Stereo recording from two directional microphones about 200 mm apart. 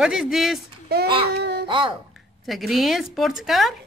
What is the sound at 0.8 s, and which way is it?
Speech, 50° right (ahead or behind).